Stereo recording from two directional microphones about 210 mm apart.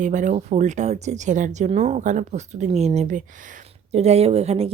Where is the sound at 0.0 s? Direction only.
35° right (ahead or behind).